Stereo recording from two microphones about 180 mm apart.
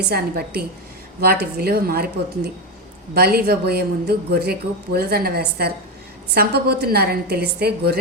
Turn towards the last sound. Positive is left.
turn(degrees=-60)  # may be behind; listen again after turning